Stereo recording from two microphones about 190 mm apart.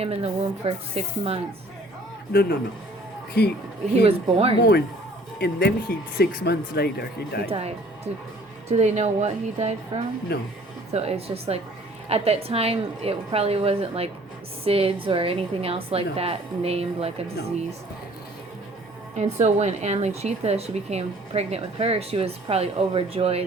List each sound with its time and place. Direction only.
0.0 s speech: 30° right (ahead or behind)
2.3 s speech: 55° left (ahead or behind)
4.0 s speech: 30° right (ahead or behind)
5.4 s speech: 50° left (ahead or behind)
7.4 s speech: 30° right (ahead or behind)
10.3 s speech: 60° left (ahead or behind)
10.9 s a woman's voice: 30° right (ahead or behind)
19.1 s speech: 35° right (ahead or behind)